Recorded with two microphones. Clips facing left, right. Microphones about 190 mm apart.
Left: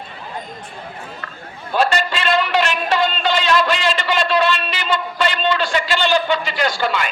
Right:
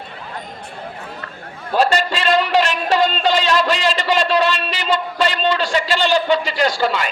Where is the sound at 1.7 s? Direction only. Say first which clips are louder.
Right 2 dB; 35° right (ahead or behind).